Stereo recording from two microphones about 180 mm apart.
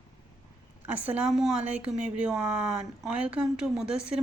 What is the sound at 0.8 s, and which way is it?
Speech, 10° right (ahead or behind).